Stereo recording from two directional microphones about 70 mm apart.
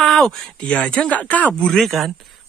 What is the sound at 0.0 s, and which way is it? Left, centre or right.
Speech, centre.